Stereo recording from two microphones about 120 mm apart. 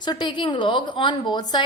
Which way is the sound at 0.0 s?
40° left (ahead or behind).